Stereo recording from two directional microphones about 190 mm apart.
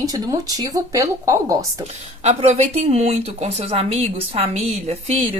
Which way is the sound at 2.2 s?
35° right (ahead or behind).